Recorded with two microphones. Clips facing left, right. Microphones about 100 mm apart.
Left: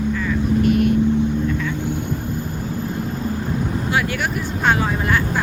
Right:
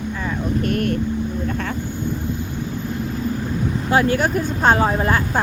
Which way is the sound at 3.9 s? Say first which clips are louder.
Right 7 dB; 35° right (ahead or behind).